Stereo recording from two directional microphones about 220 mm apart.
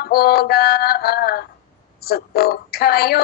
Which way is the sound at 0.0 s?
45° left (ahead or behind).